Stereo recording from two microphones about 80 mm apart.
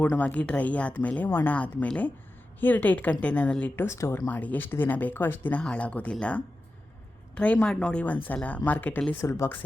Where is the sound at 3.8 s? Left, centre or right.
Left.